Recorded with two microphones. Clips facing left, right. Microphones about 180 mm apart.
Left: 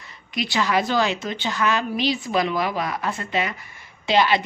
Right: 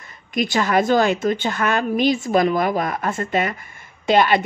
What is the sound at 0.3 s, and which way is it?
A woman's voice, 50° right (ahead or behind).